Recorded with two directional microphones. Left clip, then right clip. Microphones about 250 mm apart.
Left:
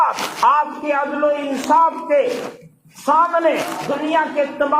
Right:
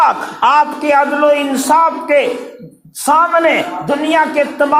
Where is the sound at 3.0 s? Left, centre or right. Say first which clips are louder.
Right 4 dB; right.